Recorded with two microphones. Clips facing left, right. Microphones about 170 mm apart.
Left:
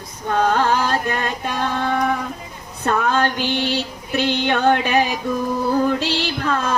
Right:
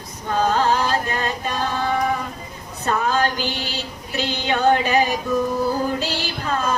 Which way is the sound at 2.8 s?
60° left (ahead or behind).